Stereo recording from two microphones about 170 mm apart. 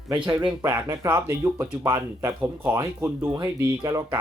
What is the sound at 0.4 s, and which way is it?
Speech, 20° right (ahead or behind).